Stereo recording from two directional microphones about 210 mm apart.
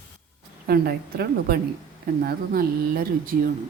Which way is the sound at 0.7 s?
45° right (ahead or behind).